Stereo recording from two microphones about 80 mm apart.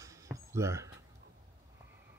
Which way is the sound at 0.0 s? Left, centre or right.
Right.